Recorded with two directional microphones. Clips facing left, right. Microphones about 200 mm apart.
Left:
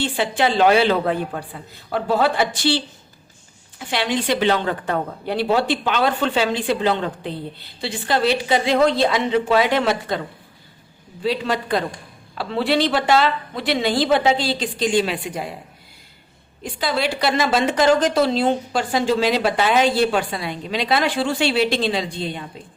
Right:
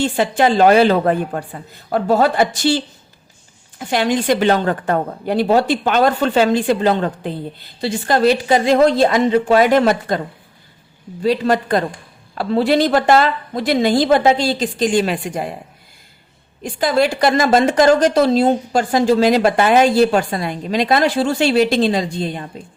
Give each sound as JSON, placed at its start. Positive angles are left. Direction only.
{"t": 0.0, "sound": "a woman's voice", "side_deg": -45}
{"t": 11.2, "sound": "a woman's voice", "side_deg": -45}
{"t": 16.6, "sound": "a woman's voice", "side_deg": -45}